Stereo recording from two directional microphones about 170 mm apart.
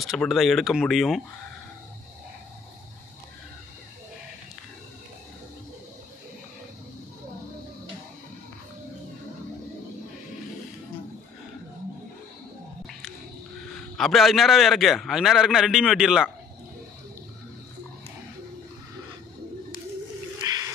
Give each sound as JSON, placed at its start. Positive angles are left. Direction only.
{"t": 0.0, "sound": "a man's voice", "side_deg": 0}
{"t": 13.9, "sound": "a man's voice", "side_deg": 0}
{"t": 20.4, "sound": "wild animals", "side_deg": -20}